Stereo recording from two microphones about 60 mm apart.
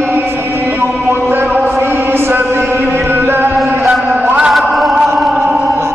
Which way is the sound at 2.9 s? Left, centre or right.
Right.